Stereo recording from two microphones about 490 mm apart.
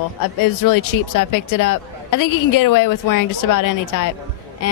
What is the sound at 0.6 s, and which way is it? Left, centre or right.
A woman's voice, left.